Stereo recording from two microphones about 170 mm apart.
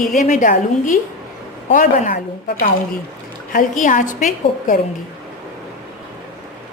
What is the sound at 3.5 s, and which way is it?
A woman's voice, 50° left (ahead or behind).